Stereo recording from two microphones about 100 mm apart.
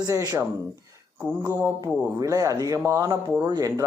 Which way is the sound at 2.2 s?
35° right (ahead or behind).